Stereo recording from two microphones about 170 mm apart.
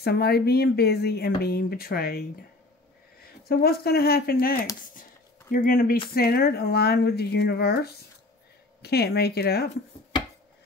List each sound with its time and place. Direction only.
0.0 s speech: 70° left (ahead or behind)